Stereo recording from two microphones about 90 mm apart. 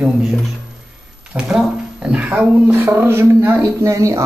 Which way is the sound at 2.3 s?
25° right (ahead or behind).